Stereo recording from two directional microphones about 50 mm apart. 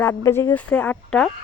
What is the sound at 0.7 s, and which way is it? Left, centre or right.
Speech, left.